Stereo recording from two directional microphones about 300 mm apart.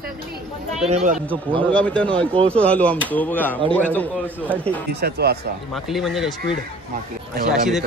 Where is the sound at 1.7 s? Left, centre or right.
Centre.